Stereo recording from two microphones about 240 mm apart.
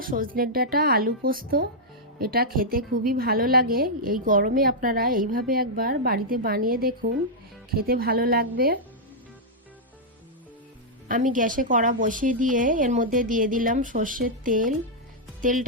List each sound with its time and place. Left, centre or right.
0.0 s a woman's voice: right
11.1 s a woman's voice: right